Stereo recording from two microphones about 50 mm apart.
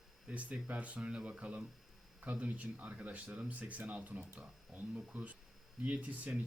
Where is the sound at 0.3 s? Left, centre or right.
Right.